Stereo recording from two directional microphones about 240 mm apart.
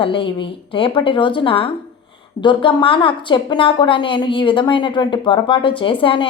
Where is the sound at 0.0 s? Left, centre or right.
Left.